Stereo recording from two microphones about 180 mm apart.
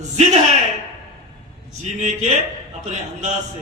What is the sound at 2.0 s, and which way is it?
Speech, 40° right (ahead or behind).